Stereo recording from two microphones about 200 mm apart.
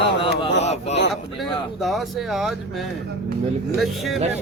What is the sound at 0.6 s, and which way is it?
Speech, 35° left (ahead or behind).